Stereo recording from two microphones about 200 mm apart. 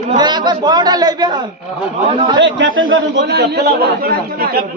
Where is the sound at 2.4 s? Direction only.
65° right (ahead or behind); by 4.4 s 50° right (ahead or behind).